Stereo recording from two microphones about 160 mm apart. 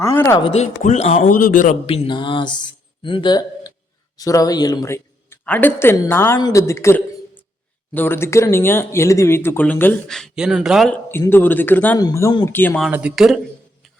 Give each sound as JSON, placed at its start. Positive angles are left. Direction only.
{"t": 0.0, "sound": "speech", "side_deg": 15}
{"t": 0.4, "sound": "speech", "side_deg": 45}
{"t": 1.3, "sound": "a man's voice", "side_deg": 60}
{"t": 1.9, "sound": "a woman's voice", "side_deg": 30}
{"t": 11.2, "sound": "speech", "side_deg": 15}
{"t": 12.8, "sound": "speech", "side_deg": -5}